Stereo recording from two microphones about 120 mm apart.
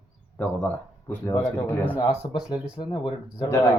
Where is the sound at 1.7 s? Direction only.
20° left (ahead or behind).